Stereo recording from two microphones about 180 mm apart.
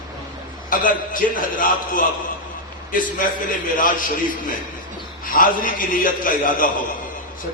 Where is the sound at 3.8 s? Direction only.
50° left (ahead or behind).